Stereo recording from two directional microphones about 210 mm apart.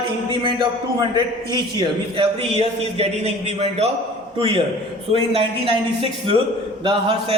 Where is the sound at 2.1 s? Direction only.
25° right (ahead or behind).